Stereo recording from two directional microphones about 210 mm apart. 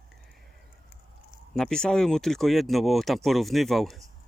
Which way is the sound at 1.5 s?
5° left (ahead or behind).